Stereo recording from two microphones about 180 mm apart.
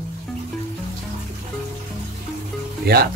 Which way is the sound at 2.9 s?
60° right (ahead or behind).